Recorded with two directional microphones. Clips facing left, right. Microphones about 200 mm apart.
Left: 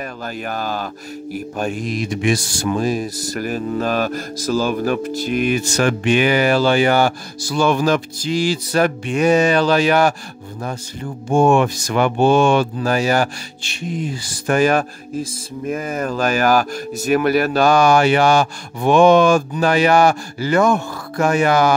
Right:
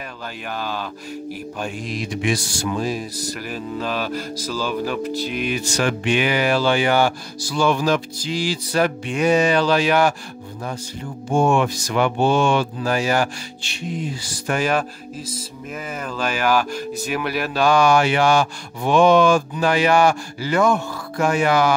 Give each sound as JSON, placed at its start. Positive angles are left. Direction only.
{"t": 0.5, "sound": "speech", "side_deg": 45}
{"t": 11.3, "sound": "speech", "side_deg": 50}